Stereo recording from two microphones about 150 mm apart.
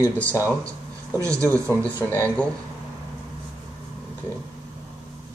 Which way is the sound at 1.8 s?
10° left (ahead or behind).